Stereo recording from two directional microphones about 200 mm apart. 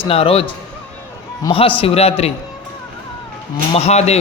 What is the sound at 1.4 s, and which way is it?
Speech, 25° left (ahead or behind).